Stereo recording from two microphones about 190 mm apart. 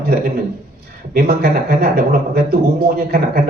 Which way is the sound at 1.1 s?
55° right (ahead or behind).